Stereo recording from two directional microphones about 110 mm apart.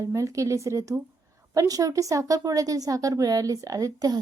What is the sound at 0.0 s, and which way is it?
A woman's voice, 30° right (ahead or behind).